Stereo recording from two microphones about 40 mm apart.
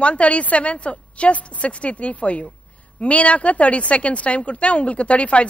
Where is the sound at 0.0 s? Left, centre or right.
Left.